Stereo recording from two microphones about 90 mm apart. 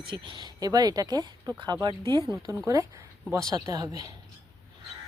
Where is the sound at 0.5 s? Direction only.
45° right (ahead or behind).